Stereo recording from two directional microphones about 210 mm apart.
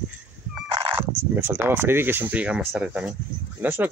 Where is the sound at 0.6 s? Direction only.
20° right (ahead or behind).